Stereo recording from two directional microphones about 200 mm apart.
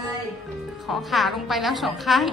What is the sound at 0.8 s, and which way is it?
A woman's voice, centre (ahead or behind).